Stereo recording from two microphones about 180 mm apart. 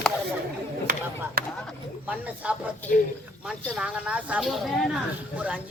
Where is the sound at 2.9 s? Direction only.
55° left (ahead or behind).